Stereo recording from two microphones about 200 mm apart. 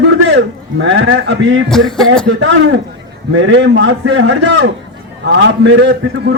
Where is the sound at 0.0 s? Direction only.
65° right (ahead or behind).